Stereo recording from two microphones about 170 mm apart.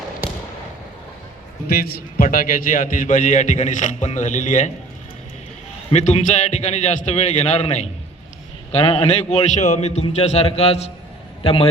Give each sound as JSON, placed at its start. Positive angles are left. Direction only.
{"t": 0.2, "sound": "basketball bounce", "side_deg": -10}
{"t": 1.6, "sound": "a man's voice", "side_deg": 65}
{"t": 5.9, "sound": "a man's voice", "side_deg": 40}